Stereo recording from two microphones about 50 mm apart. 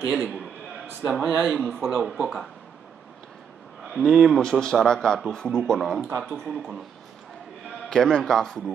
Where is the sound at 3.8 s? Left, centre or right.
Centre.